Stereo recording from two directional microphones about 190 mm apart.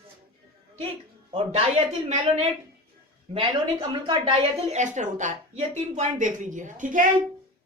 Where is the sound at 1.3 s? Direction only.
30° right (ahead or behind).